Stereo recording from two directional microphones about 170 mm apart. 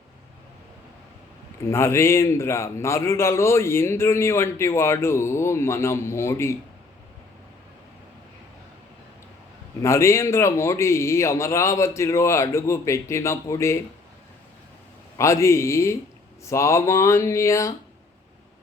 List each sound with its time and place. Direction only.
1.6 s a man's voice: 15° left (ahead or behind)
9.8 s a man's voice: 15° left (ahead or behind)
15.2 s a man's voice: 15° left (ahead or behind)